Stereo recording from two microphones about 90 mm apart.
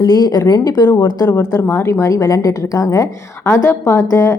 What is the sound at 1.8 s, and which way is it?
A woman's voice, 35° left (ahead or behind).